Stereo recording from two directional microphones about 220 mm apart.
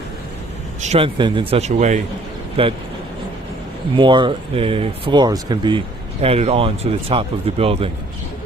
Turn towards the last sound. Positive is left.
turn(degrees=-25)  # may be behind; listen again after turning